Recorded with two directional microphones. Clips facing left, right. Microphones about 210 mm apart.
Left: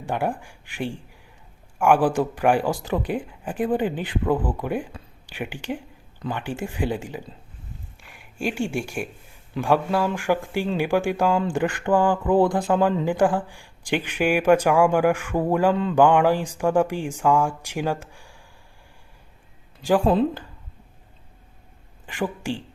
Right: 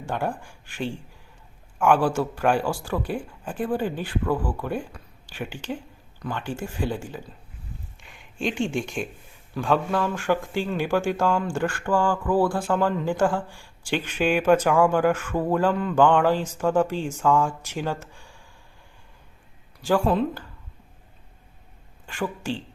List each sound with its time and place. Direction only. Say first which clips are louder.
0.0 s speech: left 2 dB; 15° left (ahead or behind)
4.9 s a sound: left 3 dB; 25° left (ahead or behind)
5.3 s speech: left 2 dB; 15° left (ahead or behind)
15.7 s speech: left 2 dB; 25° left (ahead or behind)
16.0 s speech: left 1 dB; 10° left (ahead or behind)
22.0 s a woman's voice: left 2 dB; 15° left (ahead or behind)